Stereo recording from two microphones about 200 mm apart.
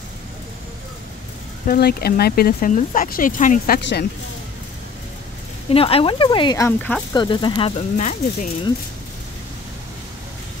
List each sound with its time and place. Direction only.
1.7 s speech: 50° left (ahead or behind)
5.7 s speech: 30° left (ahead or behind); by 7.2 s 10° left (ahead or behind)
7.2 s speech: 25° left (ahead or behind)
8.0 s speech: 40° left (ahead or behind)